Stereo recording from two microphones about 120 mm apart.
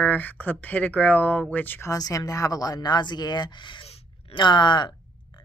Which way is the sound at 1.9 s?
30° left (ahead or behind).